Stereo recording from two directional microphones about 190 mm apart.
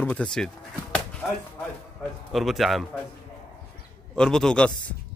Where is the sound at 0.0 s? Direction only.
5° left (ahead or behind).